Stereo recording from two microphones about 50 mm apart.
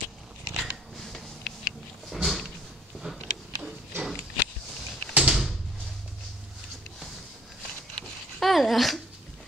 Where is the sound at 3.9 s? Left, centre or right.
Right.